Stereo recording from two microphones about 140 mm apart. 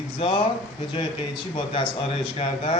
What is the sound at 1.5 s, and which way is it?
Speech, 40° left (ahead or behind).